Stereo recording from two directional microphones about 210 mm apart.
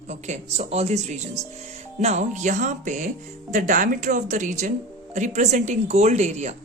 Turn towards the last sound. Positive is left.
turn(degrees=-35)  # may be behind; listen again after turning